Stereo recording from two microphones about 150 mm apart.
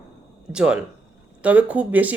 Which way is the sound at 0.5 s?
5° right (ahead or behind).